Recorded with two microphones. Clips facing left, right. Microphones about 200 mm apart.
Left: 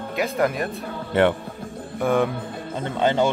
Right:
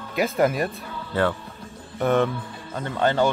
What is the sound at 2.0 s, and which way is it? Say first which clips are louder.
Music: even; 10° left (ahead or behind).